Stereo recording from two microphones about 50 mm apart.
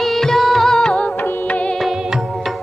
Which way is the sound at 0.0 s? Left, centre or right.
Centre.